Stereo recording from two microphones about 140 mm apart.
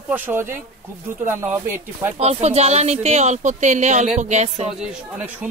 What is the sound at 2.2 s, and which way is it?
A man's voice, 50° right (ahead or behind).